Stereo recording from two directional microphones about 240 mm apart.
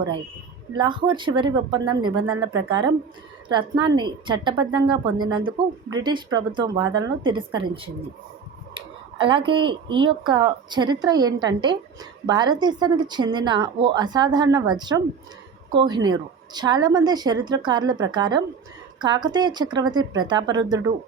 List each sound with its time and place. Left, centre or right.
0.8 s a woman's voice: centre
2.2 s speech: right
3.5 s a woman's voice: centre